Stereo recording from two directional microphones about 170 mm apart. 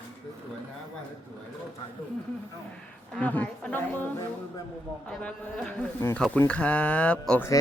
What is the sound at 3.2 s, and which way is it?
A man's voice, 10° left (ahead or behind).